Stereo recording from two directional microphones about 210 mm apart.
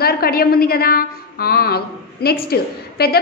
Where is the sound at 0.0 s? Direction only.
45° left (ahead or behind).